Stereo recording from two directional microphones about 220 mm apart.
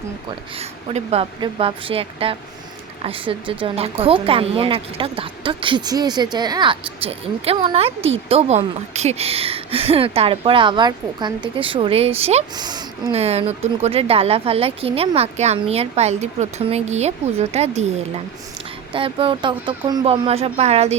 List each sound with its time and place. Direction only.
0.3 s a woman's voice: 25° right (ahead or behind)
18.9 s a woman's voice: 25° right (ahead or behind)